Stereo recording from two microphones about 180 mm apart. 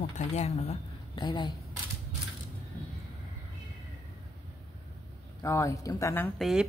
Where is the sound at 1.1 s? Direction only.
25° left (ahead or behind).